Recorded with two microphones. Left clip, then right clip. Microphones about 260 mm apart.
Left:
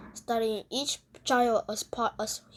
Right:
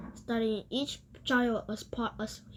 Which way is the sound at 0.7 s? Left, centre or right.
Centre.